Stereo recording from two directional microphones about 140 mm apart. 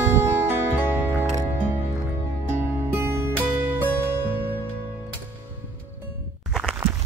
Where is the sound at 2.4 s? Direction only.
15° right (ahead or behind).